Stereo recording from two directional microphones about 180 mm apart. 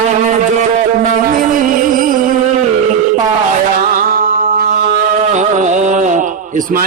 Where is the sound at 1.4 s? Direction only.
50° right (ahead or behind).